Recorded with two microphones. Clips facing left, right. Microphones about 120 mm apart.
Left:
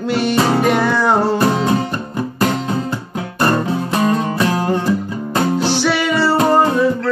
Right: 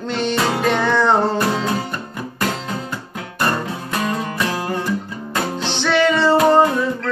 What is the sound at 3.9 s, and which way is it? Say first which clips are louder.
Music: left 5 dB; 30° left (ahead or behind).